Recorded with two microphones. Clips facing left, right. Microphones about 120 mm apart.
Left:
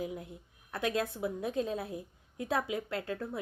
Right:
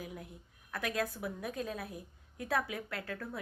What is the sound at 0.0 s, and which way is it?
A woman's voice, 25° left (ahead or behind).